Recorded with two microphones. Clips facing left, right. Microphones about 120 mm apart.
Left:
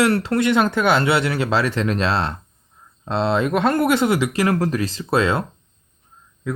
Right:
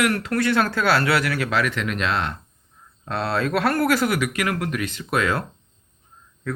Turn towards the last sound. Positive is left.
turn(degrees=25)  # may be behind; listen again after turning